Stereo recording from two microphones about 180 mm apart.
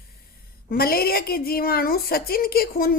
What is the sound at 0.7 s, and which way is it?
A woman's voice, 55° left (ahead or behind).